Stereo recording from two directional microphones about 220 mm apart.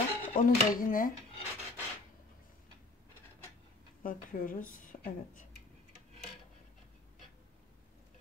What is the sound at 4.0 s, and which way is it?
A woman's voice, 40° left (ahead or behind).